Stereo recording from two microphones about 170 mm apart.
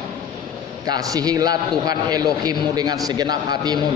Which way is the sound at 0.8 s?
25° right (ahead or behind).